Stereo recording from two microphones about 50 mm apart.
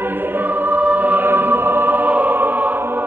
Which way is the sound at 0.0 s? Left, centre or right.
Right.